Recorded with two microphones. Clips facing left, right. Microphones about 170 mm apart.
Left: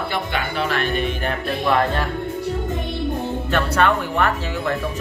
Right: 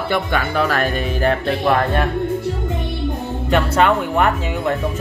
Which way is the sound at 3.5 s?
15° right (ahead or behind).